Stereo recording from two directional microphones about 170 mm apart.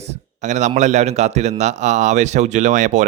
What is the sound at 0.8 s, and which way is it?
A man's voice, 40° right (ahead or behind).